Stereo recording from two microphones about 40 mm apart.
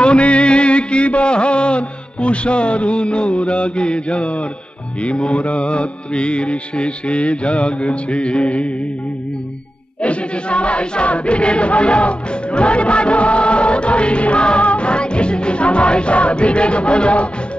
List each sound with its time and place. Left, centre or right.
0.0 s music: left
10.0 s music: left